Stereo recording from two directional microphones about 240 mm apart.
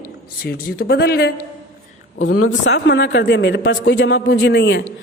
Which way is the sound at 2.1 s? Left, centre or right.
Left.